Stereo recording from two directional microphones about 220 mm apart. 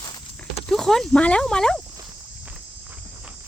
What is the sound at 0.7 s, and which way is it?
Speech, centre (ahead or behind).